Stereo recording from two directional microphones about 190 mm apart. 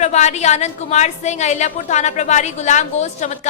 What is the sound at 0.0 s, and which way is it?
A woman's voice, 35° left (ahead or behind).